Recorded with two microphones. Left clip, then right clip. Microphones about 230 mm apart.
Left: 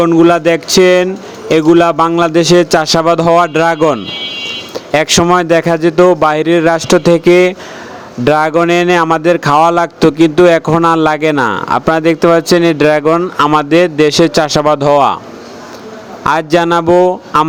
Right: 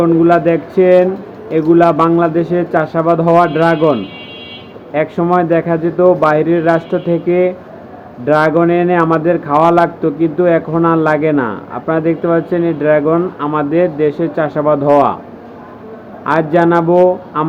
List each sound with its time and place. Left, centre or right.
0.0 s speech: left
16.2 s speech: left